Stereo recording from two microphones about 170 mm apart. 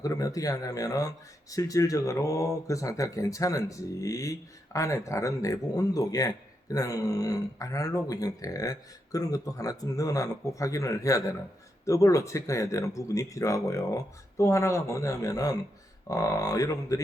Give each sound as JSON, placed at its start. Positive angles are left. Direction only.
{"t": 0.0, "sound": "speech", "side_deg": 20}